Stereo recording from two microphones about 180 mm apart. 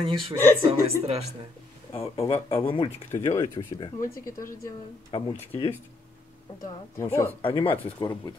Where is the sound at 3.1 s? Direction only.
15° left (ahead or behind).